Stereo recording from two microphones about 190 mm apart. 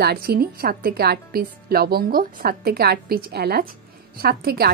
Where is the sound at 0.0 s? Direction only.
55° right (ahead or behind).